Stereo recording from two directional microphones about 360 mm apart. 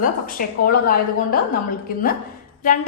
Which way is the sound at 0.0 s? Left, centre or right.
Left.